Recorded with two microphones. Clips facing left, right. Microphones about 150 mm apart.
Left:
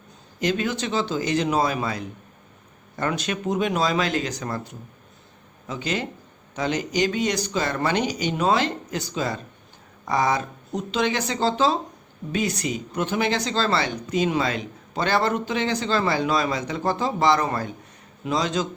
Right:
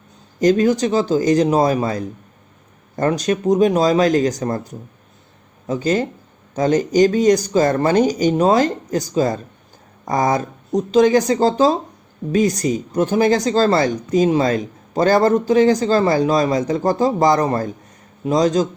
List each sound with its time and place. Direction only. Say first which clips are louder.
0.3 s speech: right 10 dB; 40° right (ahead or behind)